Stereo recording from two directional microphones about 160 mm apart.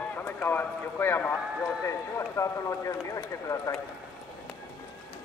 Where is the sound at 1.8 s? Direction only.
20° left (ahead or behind).